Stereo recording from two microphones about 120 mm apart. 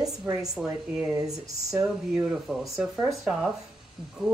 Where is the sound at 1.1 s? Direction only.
30° right (ahead or behind).